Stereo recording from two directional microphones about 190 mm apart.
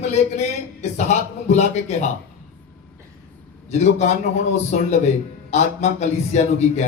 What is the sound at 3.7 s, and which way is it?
A man's voice, 35° left (ahead or behind).